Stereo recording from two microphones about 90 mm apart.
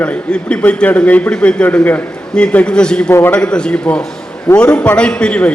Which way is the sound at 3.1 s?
25° left (ahead or behind).